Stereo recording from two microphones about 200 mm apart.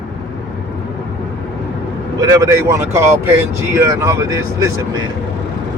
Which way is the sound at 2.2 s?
15° right (ahead or behind).